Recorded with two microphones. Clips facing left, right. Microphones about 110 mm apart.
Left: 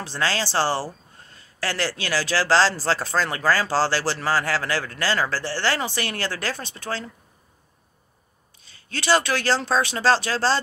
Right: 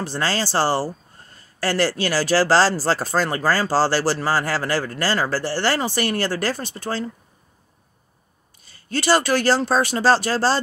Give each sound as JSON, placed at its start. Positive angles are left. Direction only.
{"t": 0.0, "sound": "speech", "side_deg": -5}
{"t": 9.0, "sound": "speech", "side_deg": -5}